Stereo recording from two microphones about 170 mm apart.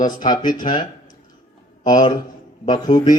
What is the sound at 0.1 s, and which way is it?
Speech, 25° left (ahead or behind).